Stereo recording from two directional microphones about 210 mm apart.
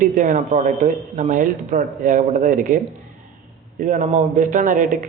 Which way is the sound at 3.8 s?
35° right (ahead or behind).